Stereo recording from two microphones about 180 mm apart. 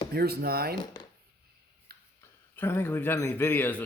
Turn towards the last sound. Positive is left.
turn(degrees=10)  # may be behind; listen again after turning